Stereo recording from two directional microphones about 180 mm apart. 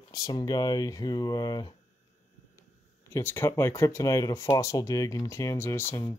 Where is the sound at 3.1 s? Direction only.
10° left (ahead or behind).